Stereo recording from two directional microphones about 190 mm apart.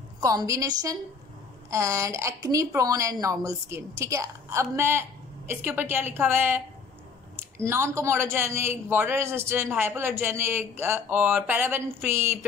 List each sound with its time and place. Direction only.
0.2 s speech: 20° right (ahead or behind)